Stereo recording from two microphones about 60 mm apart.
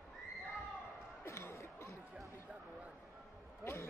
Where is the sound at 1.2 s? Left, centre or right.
Left.